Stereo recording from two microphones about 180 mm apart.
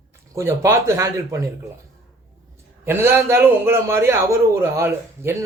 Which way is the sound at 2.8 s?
15° right (ahead or behind).